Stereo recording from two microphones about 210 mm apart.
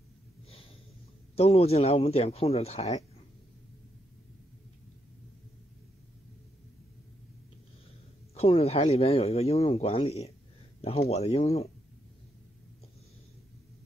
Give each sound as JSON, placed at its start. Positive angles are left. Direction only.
{"t": 1.3, "sound": "speech", "side_deg": 30}
{"t": 8.4, "sound": "speech", "side_deg": 30}